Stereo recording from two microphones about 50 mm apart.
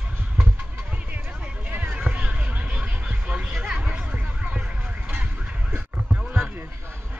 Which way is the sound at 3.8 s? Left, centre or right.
Right.